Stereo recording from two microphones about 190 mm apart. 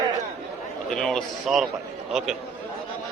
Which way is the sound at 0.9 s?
5° left (ahead or behind).